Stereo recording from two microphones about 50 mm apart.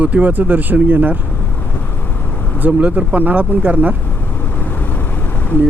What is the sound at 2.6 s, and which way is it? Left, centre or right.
Speech, right.